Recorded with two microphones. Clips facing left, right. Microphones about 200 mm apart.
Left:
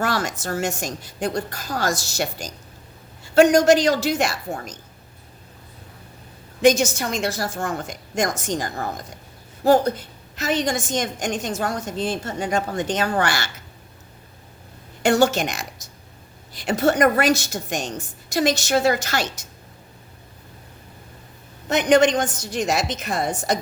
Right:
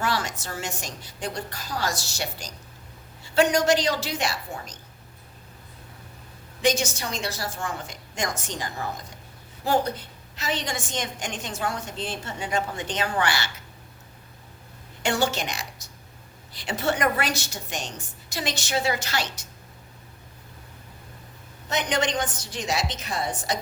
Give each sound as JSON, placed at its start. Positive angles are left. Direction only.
{"t": 0.0, "sound": "a woman's voice", "side_deg": 45}
{"t": 6.6, "sound": "a woman's voice", "side_deg": 45}
{"t": 15.0, "sound": "a woman's voice", "side_deg": 45}
{"t": 21.7, "sound": "a woman's voice", "side_deg": 50}